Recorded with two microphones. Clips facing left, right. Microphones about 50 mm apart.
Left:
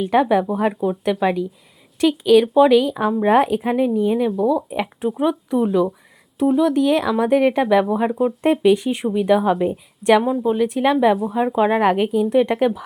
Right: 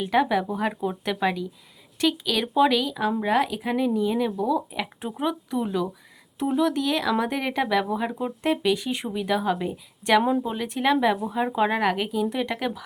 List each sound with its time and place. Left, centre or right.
0.0 s speech: centre
0.7 s speech: centre
1.1 s speech: centre
2.8 s speech: left
4.3 s speech: centre
6.7 s speech: left
8.4 s speech: left
10.4 s speech: centre
11.8 s speech: centre